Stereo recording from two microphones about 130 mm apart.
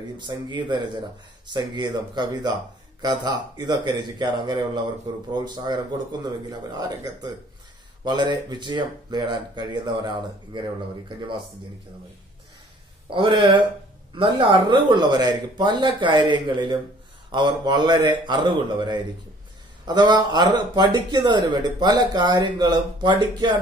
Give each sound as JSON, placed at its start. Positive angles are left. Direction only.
{"t": 0.2, "sound": "speech", "side_deg": -35}
{"t": 13.1, "sound": "speech", "side_deg": -40}